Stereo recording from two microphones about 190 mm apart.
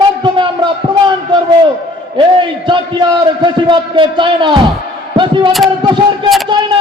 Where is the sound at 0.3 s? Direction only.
25° right (ahead or behind).